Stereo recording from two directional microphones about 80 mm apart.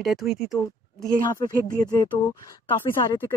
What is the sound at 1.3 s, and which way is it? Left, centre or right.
Speech, left.